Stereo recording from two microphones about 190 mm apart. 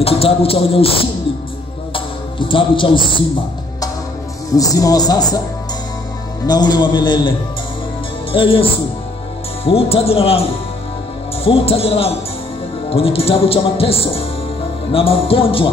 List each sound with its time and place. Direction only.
0.0 s a man's voice: 30° left (ahead or behind)
2.0 s music: 25° left (ahead or behind)
4.6 s speech: 20° left (ahead or behind)
6.4 s speech: 20° left (ahead or behind)
9.7 s speech: 30° left (ahead or behind)
11.4 s speech: 30° left (ahead or behind)